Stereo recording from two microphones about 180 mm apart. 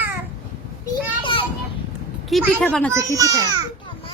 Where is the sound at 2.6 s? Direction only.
5° left (ahead or behind).